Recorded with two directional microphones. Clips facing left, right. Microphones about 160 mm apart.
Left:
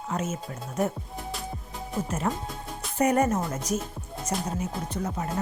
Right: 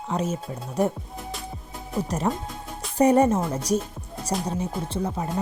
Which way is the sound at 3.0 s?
30° right (ahead or behind).